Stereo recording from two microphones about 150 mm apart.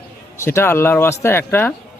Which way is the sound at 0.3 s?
15° left (ahead or behind).